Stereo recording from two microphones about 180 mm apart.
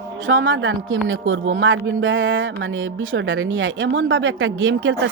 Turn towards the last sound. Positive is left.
turn(degrees=-90)